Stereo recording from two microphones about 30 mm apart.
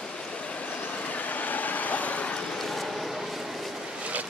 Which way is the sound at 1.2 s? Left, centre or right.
Left.